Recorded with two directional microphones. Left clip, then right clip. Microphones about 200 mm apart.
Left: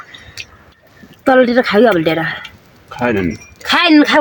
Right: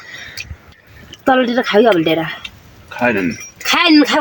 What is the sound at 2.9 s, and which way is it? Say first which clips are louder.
Speech: right 1 dB; 60° left (ahead or behind).